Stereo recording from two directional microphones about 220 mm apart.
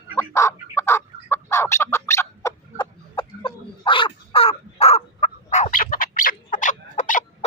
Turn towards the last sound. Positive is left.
turn(degrees=35)  # may be behind; listen again after turning